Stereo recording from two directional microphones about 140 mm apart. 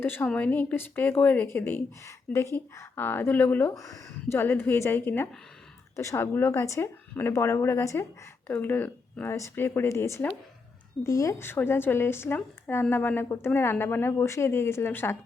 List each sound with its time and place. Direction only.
0.0 s a woman's voice: 15° left (ahead or behind)